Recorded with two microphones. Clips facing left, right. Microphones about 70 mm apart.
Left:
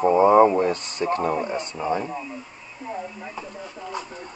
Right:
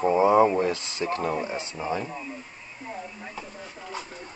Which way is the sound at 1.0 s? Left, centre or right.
Left.